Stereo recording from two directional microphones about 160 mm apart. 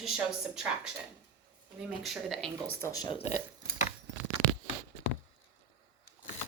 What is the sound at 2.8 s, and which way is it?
Speech, 15° left (ahead or behind).